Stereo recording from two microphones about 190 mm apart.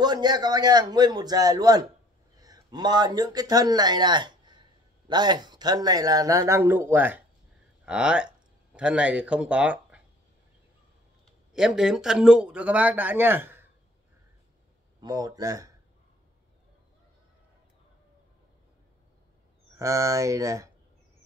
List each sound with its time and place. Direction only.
0.0 s a man's voice: 20° right (ahead or behind); by 10.0 s 5° right (ahead or behind)
11.5 s speech: 5° right (ahead or behind)
15.0 s a man's voice: 20° right (ahead or behind)
19.8 s speech: 15° right (ahead or behind)